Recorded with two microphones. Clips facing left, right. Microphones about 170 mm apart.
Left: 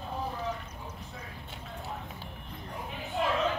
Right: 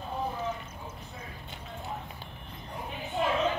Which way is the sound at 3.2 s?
Centre (ahead or behind).